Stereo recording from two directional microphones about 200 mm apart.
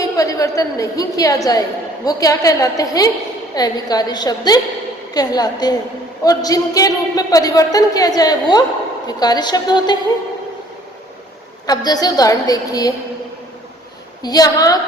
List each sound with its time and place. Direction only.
0.0 s a woman's voice: 15° left (ahead or behind)
11.6 s a man's voice: 20° left (ahead or behind)
14.2 s a man's voice: 20° left (ahead or behind)